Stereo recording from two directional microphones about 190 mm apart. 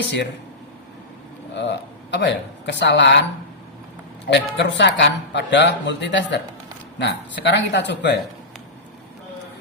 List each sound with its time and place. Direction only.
0.0 s a woman's voice: 65° left (ahead or behind)
1.5 s a woman's voice: 65° left (ahead or behind)
4.3 s a woman's voice: 65° left (ahead or behind)